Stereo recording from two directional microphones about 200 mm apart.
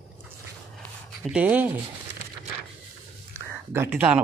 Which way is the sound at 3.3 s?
10° right (ahead or behind).